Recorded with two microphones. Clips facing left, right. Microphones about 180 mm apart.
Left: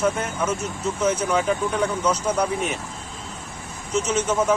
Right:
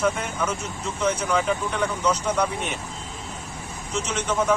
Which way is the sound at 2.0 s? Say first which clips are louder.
Left 1 dB; 10° left (ahead or behind).